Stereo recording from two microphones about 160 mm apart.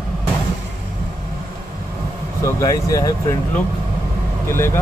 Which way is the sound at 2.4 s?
20° left (ahead or behind).